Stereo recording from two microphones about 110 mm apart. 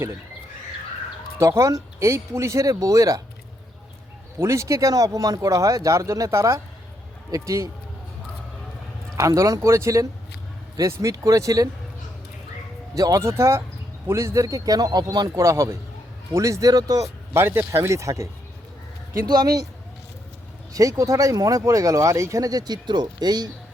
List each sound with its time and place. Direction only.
1.4 s speech: 30° right (ahead or behind)
4.4 s speech: 25° right (ahead or behind)
9.1 s speech: 30° right (ahead or behind)
13.0 s speech: 30° right (ahead or behind)
15.3 s speech: 25° right (ahead or behind)
19.3 s speech: 35° right (ahead or behind)
20.7 s speech: 30° right (ahead or behind)